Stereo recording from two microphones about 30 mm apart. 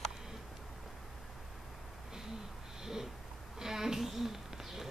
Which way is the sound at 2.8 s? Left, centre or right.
Centre.